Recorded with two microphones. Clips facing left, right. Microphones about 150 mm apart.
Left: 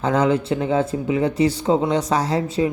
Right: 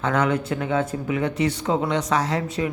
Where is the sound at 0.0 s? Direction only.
30° left (ahead or behind).